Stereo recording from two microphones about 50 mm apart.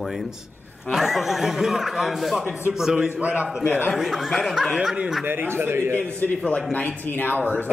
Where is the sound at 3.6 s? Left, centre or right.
Left.